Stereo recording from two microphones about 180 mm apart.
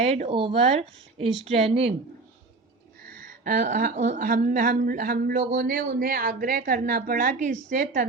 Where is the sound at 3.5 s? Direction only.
50° right (ahead or behind).